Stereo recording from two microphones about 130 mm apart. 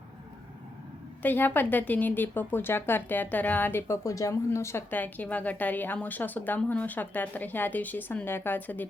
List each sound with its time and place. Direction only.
1.2 s a woman's voice: 15° left (ahead or behind)